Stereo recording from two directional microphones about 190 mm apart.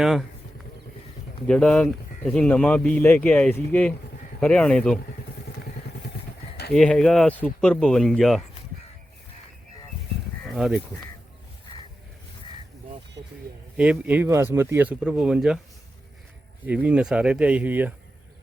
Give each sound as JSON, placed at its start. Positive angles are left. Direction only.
{"t": 0.0, "sound": "speech", "side_deg": 0}
{"t": 1.5, "sound": "speech", "side_deg": 5}
{"t": 6.7, "sound": "speech", "side_deg": 0}
{"t": 10.4, "sound": "a sound", "side_deg": 0}
{"t": 13.7, "sound": "speech", "side_deg": -5}
{"t": 16.6, "sound": "speech", "side_deg": -5}